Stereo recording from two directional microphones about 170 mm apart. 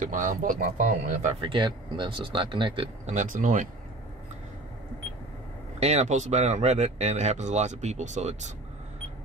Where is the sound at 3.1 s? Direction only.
50° right (ahead or behind).